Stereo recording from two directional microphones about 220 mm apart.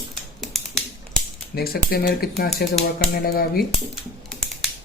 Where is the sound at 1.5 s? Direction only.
45° left (ahead or behind).